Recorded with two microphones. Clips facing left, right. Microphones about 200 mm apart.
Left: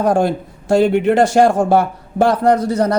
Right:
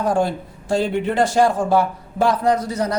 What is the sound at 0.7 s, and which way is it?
A man's voice, 70° left (ahead or behind).